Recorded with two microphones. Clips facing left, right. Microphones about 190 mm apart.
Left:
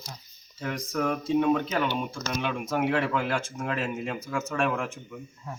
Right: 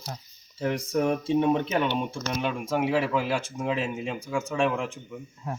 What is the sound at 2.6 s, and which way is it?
A man's voice, 5° right (ahead or behind).